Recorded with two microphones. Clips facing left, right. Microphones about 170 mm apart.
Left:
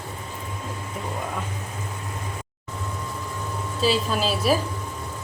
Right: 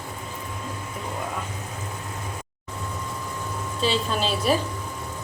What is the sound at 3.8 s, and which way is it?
Speech, 5° left (ahead or behind).